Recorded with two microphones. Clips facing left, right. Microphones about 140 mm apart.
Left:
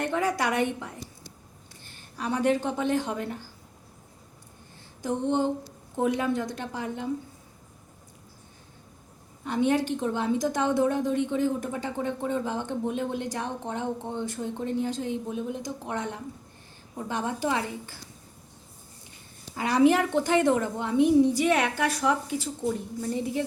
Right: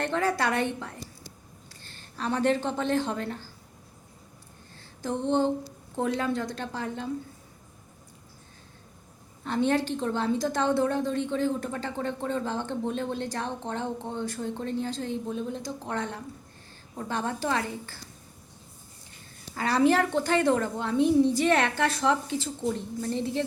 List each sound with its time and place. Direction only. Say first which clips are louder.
0.0 s a woman's voice: even; 15° left (ahead or behind)
5.0 s a woman's voice: even; 15° left (ahead or behind)
9.4 s a woman's voice: left 1 dB; 15° left (ahead or behind)
19.5 s a woman's voice: left 2 dB; 15° left (ahead or behind)